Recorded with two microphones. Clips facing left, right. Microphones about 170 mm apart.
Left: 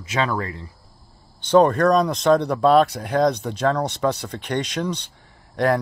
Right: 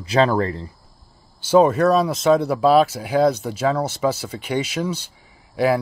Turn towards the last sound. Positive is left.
turn(degrees=-5)  # may be behind; listen again after turning